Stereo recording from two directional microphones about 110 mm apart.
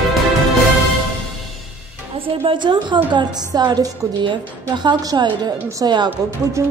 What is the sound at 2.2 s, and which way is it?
Music, 50° right (ahead or behind).